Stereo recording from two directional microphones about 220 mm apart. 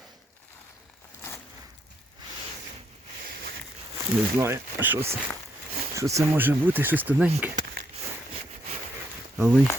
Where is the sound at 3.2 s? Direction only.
40° right (ahead or behind).